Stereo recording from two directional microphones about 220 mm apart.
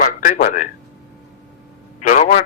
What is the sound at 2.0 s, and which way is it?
Speech, 35° left (ahead or behind).